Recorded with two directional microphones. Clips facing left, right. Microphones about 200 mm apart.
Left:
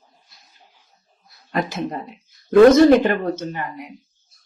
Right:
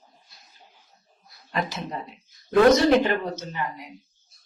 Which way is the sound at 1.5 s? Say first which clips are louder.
Left 5 dB; 50° left (ahead or behind).